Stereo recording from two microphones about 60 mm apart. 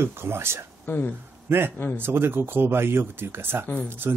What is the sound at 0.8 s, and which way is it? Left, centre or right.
Speech, left.